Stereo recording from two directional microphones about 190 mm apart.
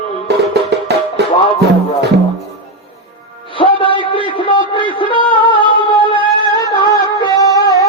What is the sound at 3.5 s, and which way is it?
Music, 25° left (ahead or behind).